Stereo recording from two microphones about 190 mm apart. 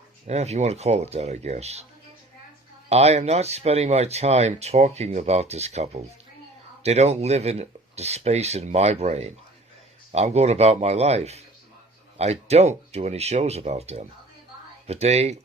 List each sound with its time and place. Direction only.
0.3 s speech: 35° right (ahead or behind)
2.9 s speech: 35° right (ahead or behind)